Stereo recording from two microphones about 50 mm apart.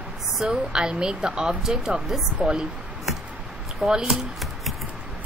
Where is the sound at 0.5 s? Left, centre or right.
Centre.